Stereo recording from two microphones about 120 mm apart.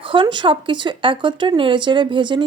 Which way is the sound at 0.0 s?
45° right (ahead or behind).